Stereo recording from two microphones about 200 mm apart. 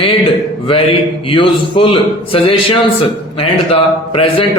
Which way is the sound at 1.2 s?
25° left (ahead or behind).